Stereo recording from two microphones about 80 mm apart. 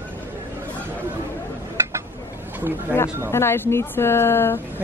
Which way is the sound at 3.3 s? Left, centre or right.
Left.